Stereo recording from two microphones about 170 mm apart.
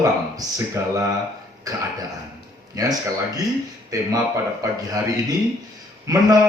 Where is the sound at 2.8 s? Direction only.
20° right (ahead or behind).